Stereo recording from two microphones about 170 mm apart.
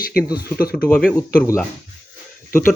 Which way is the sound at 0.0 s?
60° left (ahead or behind).